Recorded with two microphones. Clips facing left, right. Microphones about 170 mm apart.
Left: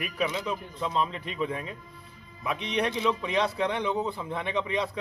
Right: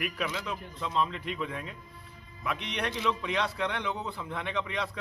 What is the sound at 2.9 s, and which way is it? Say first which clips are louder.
A man's voice: left 3 dB; 25° left (ahead or behind).